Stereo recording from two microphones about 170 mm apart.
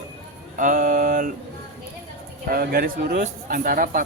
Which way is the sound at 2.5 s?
60° right (ahead or behind).